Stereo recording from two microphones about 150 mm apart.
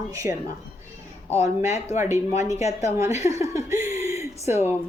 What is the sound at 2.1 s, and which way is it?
Speech, 50° left (ahead or behind).